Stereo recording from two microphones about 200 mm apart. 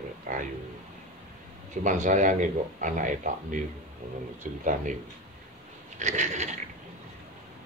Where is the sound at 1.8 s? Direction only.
40° right (ahead or behind).